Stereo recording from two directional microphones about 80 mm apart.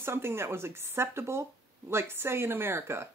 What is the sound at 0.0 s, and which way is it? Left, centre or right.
Speech, right.